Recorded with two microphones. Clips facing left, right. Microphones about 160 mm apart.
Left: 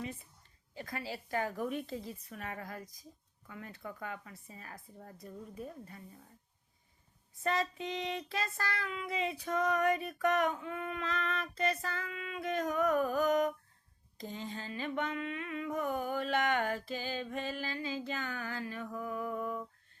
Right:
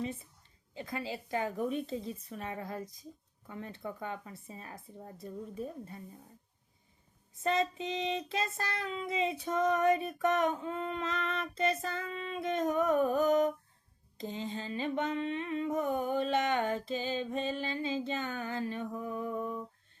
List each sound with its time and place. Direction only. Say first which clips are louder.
0.7 s child singing: right 3 dB; 20° right (ahead or behind)
7.4 s child singing: right 3 dB; 25° right (ahead or behind)